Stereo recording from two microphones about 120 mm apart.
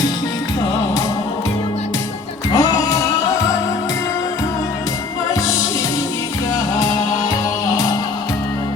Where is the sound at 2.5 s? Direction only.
30° left (ahead or behind).